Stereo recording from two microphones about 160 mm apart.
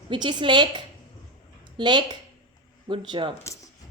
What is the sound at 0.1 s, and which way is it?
A woman's voice, 30° right (ahead or behind).